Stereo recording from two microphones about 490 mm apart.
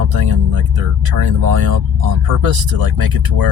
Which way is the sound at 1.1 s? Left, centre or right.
Right.